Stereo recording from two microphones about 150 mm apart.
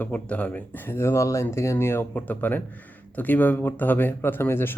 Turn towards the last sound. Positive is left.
turn(degrees=15)  # may be behind; listen again after turning